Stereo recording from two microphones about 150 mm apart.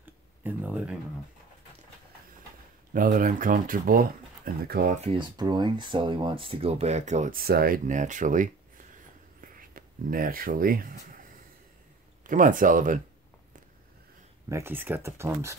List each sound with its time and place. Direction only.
0.0 s a sound: 10° right (ahead or behind)
2.9 s speech: 65° right (ahead or behind)
4.6 s speech: 90° right
4.9 s speech: 45° right (ahead or behind)
5.4 s speech: 30° right (ahead or behind); by 7.3 s 50° right (ahead or behind)
7.3 s speech: 85° right; by 8.8 s 60° right (ahead or behind)
9.4 s a sound: 65° right (ahead or behind)
12.2 s speech: 60° right (ahead or behind)
14.5 s speech: 15° right (ahead or behind)